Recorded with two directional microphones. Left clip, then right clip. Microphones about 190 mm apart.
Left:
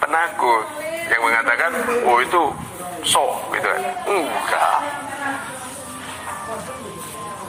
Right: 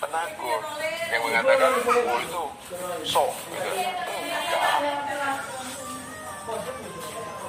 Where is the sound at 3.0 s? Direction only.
45° left (ahead or behind).